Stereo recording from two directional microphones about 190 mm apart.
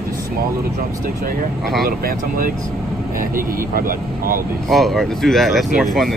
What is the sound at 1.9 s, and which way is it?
Speech, 50° right (ahead or behind).